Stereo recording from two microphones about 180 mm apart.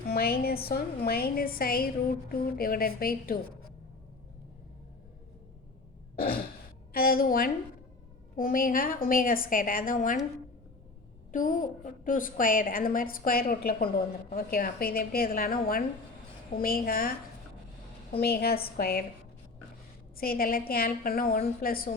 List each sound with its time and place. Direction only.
0.1 s a woman's voice: 55° left (ahead or behind)
6.1 s throat clearing: 55° left (ahead or behind)
6.9 s a woman's voice: 55° left (ahead or behind)
11.3 s a woman's voice: 50° left (ahead or behind)
18.2 s a woman's voice: 60° left (ahead or behind)
20.1 s a woman's voice: 55° left (ahead or behind)